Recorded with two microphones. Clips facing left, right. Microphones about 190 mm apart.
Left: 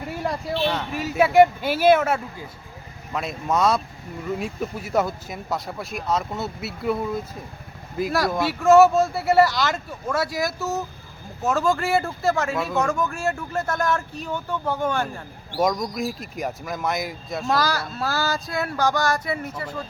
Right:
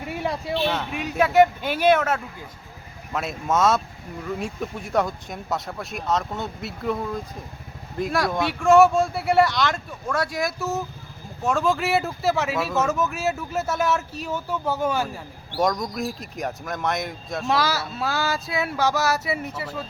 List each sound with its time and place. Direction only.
0.1 s a man's voice: centre (ahead or behind)